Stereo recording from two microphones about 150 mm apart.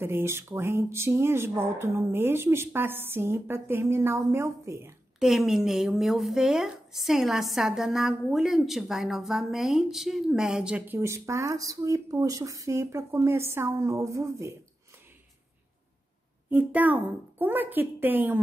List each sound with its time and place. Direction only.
0.0 s speech: 15° right (ahead or behind)
5.2 s speech: centre (ahead or behind)
11.0 s speech: 20° right (ahead or behind)
16.4 s speech: 10° right (ahead or behind)